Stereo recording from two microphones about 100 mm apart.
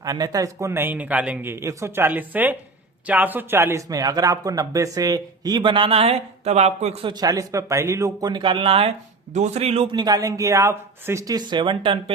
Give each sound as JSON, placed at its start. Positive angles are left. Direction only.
{"t": 0.0, "sound": "speech", "side_deg": -40}
{"t": 3.8, "sound": "speech", "side_deg": -40}
{"t": 7.1, "sound": "speech", "side_deg": -40}
{"t": 8.4, "sound": "speech", "side_deg": -60}
{"t": 9.5, "sound": "speech", "side_deg": -90}
{"t": 9.9, "sound": "speech", "side_deg": -40}